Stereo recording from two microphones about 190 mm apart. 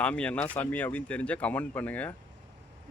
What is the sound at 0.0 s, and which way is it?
A man's voice, 5° left (ahead or behind).